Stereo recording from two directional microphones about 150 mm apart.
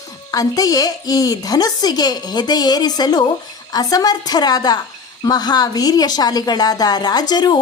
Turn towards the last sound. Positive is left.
turn(degrees=30)  # may be behind; listen again after turning